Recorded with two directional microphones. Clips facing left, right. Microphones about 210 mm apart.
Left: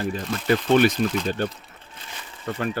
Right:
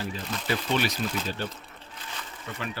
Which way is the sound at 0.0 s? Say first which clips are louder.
Left 7 dB; 50° left (ahead or behind).